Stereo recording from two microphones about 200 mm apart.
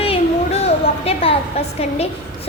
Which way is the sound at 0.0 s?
30° left (ahead or behind).